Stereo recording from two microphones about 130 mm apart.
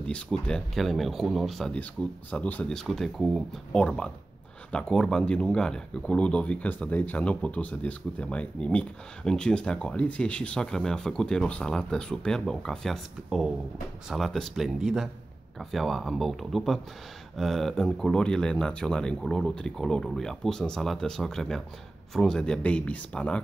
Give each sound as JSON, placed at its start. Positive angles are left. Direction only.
{"t": 0.0, "sound": "speech", "side_deg": 5}